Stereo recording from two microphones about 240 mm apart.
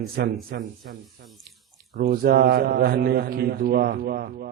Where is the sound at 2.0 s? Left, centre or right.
Right.